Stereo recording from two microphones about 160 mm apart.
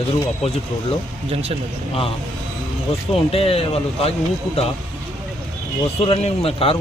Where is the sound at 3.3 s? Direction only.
40° left (ahead or behind).